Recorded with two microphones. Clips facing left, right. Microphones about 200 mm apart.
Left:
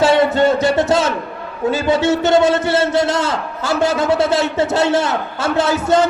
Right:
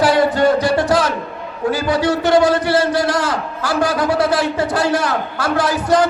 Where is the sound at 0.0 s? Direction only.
25° left (ahead or behind).